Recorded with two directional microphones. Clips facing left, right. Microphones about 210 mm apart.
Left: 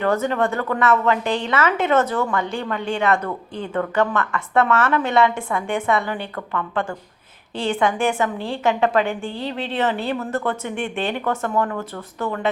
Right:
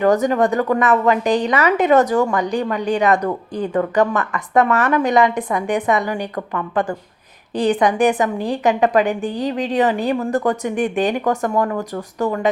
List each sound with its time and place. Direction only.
0.0 s a woman's voice: 15° right (ahead or behind)